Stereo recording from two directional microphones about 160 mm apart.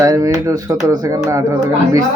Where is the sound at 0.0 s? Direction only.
20° right (ahead or behind).